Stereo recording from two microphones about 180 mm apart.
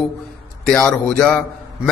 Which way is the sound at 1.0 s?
5° left (ahead or behind).